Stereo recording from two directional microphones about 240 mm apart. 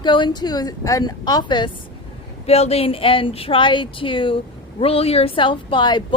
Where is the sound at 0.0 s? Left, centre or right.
Centre.